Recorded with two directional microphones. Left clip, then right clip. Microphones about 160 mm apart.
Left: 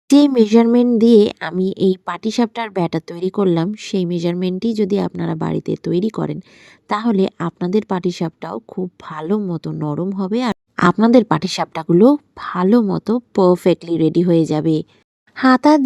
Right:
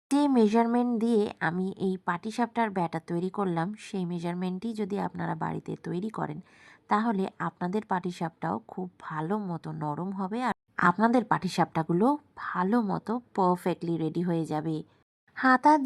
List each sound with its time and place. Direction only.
0.1 s speech: 40° left (ahead or behind)